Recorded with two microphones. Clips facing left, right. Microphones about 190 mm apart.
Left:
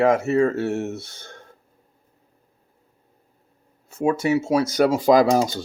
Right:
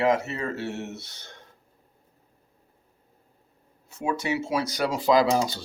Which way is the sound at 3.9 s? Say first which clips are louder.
Left 7 dB; 50° left (ahead or behind).